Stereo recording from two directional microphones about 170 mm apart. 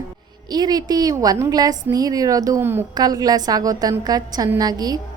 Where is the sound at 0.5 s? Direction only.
25° right (ahead or behind).